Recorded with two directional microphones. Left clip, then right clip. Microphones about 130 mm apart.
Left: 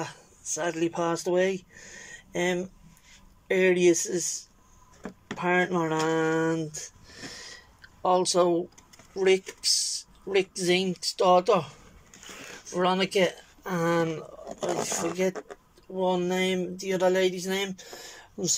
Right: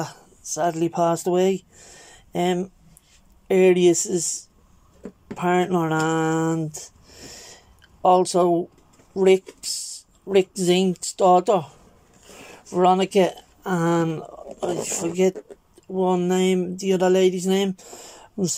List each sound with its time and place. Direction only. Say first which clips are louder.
0.0 s speech: right 4 dB; 20° right (ahead or behind)
15.9 s speech: right 5 dB; 20° right (ahead or behind)